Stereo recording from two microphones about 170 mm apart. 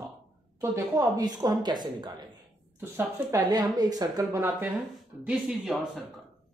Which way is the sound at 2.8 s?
15° right (ahead or behind).